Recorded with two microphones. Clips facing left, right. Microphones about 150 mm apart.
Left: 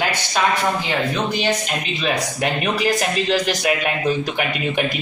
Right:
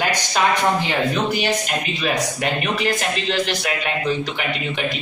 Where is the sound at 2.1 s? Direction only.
35° left (ahead or behind).